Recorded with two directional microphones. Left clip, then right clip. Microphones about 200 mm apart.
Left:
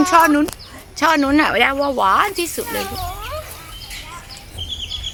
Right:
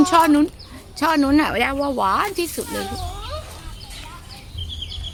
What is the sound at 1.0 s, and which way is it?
A woman's voice, centre (ahead or behind).